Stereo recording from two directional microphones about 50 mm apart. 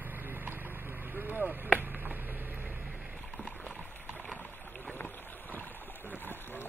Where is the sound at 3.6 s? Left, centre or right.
Left.